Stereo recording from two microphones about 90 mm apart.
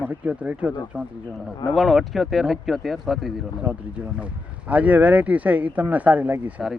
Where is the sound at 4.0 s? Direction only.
15° right (ahead or behind).